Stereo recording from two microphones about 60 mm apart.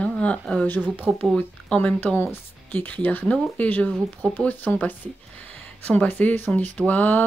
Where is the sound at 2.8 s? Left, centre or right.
Left.